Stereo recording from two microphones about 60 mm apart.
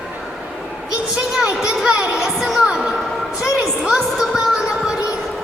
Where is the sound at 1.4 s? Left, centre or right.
Centre.